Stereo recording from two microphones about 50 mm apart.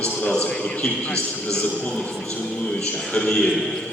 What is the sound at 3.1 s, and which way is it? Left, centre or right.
Speech, centre.